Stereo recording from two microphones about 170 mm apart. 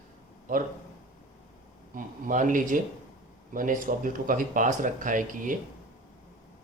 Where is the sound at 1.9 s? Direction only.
50° right (ahead or behind).